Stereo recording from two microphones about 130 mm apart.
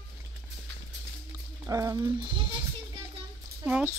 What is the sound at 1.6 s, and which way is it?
Speech, 25° right (ahead or behind).